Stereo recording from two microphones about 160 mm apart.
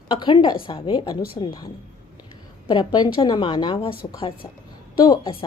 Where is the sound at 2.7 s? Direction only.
30° left (ahead or behind).